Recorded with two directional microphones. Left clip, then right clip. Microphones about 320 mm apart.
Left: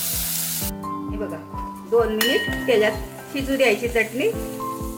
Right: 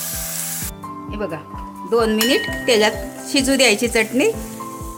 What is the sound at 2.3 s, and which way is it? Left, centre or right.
A woman's voice, right.